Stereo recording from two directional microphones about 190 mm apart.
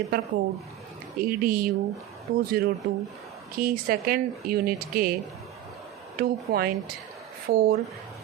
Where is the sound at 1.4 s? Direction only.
50° right (ahead or behind).